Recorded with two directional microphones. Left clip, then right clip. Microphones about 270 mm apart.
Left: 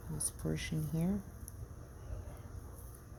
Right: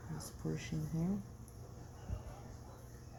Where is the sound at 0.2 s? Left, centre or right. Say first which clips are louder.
Left 4 dB; left.